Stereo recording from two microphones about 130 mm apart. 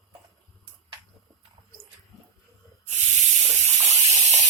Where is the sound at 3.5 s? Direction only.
60° right (ahead or behind).